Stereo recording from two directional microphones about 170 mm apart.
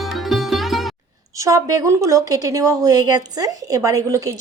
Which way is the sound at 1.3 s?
20° right (ahead or behind).